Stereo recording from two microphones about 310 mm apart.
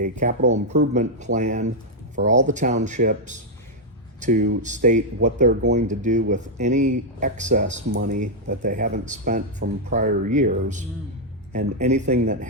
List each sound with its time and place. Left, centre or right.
0.0 s speech: right